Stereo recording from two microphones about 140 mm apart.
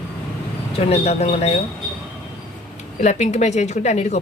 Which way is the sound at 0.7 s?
45° left (ahead or behind).